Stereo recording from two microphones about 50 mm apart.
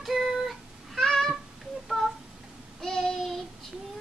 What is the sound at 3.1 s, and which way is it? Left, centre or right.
Child singing, centre.